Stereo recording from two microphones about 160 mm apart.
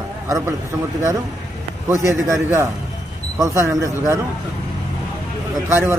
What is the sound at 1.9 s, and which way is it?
A man's voice, 20° right (ahead or behind).